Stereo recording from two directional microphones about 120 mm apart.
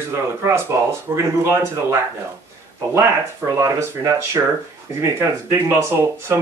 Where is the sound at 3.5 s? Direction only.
30° right (ahead or behind).